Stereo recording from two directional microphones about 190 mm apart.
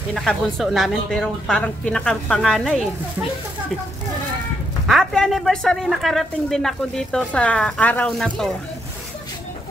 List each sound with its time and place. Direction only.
0.1 s speech: centre (ahead or behind)
4.8 s speech: centre (ahead or behind)